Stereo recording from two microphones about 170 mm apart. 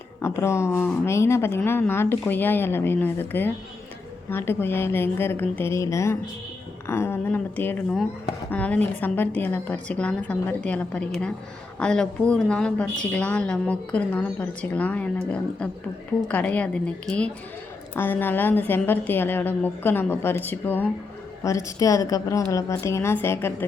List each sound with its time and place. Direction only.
0.2 s a woman's voice: 15° left (ahead or behind)